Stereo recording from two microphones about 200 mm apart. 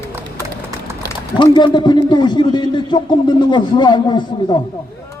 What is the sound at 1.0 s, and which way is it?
A man's voice, 20° left (ahead or behind).